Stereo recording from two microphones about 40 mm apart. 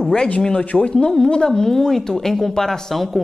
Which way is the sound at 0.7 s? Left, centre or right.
Centre.